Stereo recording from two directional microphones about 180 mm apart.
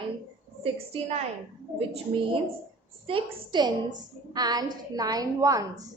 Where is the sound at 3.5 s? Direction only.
25° right (ahead or behind).